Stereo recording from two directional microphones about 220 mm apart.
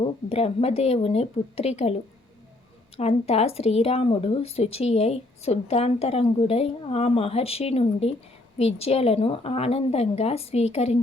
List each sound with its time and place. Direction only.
0.3 s speech: 30° left (ahead or behind)
3.0 s speech: 30° left (ahead or behind)